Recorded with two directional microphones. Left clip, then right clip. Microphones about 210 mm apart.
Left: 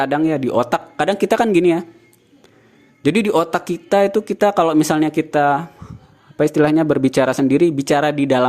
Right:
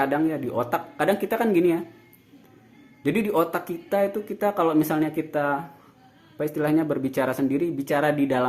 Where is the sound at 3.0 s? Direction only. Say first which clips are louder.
Left 7 dB; 45° left (ahead or behind).